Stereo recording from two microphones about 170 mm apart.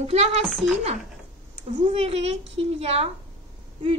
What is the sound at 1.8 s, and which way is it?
A woman's voice, 35° right (ahead or behind).